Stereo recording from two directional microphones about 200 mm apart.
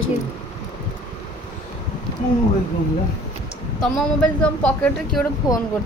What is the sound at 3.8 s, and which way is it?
Speech, 5° left (ahead or behind).